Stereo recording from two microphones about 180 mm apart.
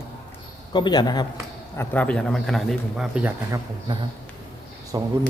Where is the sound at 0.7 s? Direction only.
25° left (ahead or behind).